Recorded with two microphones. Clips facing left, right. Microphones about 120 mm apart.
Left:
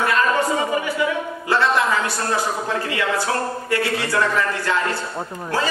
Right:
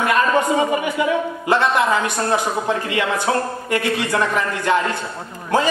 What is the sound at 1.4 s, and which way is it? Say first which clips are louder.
Speech: right 1 dB; 20° right (ahead or behind).